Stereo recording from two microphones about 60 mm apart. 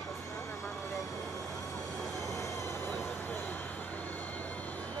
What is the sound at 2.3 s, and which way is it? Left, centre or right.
Vehicle, left.